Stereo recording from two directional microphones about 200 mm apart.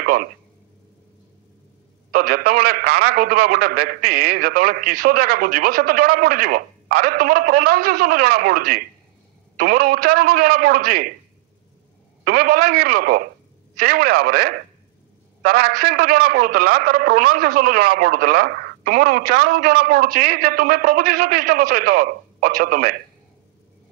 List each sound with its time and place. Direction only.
0.0 s a sound: 45° right (ahead or behind)
2.0 s a man's voice: 45° right (ahead or behind)
12.3 s a man's voice: 50° right (ahead or behind)